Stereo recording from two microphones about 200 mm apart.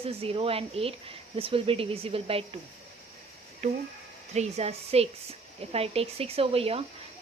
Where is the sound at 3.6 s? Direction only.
35° right (ahead or behind).